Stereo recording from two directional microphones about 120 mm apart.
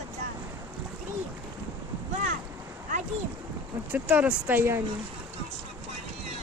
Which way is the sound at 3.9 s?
10° right (ahead or behind).